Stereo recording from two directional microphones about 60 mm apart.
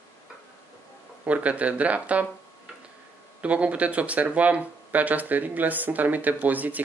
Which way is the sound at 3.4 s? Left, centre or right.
Right.